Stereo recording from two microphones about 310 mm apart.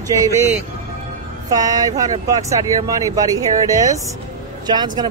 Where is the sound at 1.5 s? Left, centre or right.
Centre.